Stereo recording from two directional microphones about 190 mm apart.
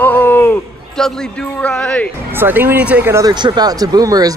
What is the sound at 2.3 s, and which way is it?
Speech, 10° right (ahead or behind).